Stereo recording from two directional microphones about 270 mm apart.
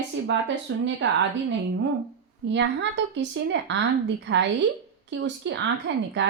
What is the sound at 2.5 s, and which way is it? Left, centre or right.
Speech, right.